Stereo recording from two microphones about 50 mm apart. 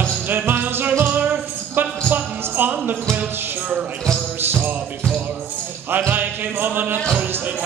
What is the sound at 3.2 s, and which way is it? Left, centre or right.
Music, right.